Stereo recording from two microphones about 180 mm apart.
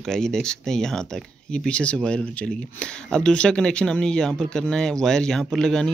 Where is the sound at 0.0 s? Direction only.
5° left (ahead or behind).